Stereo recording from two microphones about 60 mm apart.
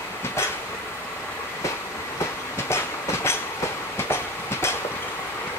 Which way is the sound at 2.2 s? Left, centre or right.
Left.